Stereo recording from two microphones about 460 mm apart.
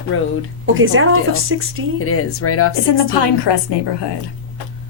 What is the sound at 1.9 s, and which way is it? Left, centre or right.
Speech, left.